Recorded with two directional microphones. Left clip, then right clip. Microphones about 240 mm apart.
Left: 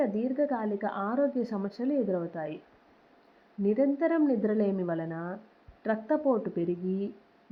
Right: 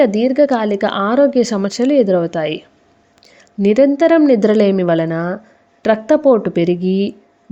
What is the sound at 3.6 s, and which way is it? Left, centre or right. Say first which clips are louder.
Speech: right 16 dB; right.